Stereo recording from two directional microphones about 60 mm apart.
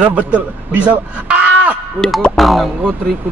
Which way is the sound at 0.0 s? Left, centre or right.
Right.